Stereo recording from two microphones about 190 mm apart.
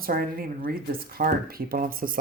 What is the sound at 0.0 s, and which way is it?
Speech, 50° right (ahead or behind).